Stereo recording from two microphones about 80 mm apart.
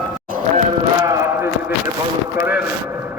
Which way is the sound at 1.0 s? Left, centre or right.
Right.